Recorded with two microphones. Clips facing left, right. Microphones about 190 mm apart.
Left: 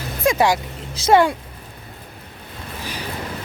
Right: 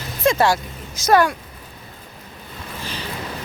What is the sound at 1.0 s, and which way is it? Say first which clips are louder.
Speech: left 1 dB; 25° left (ahead or behind).